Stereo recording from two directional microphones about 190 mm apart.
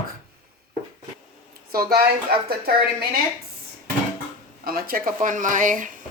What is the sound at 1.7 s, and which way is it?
Speech, 55° right (ahead or behind).